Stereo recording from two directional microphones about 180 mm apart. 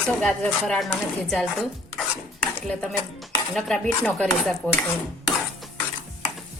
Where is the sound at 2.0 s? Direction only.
5° left (ahead or behind).